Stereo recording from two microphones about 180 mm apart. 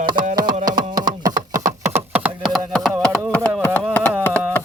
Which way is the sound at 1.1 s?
20° right (ahead or behind).